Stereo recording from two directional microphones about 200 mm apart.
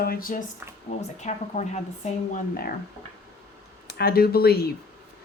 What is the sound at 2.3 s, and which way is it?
Speech, 50° left (ahead or behind).